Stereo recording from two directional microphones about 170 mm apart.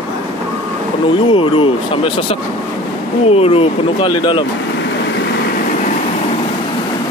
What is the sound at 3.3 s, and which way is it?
Speech, 35° left (ahead or behind).